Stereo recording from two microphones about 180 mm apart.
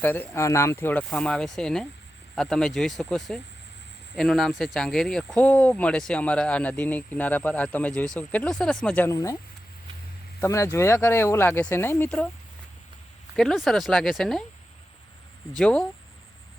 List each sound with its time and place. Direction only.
0.0 s speech: 10° left (ahead or behind)
9.0 s speech: 20° left (ahead or behind)
10.4 s speech: 15° left (ahead or behind)
13.3 s speech: centre (ahead or behind)
15.5 s speech: 5° left (ahead or behind)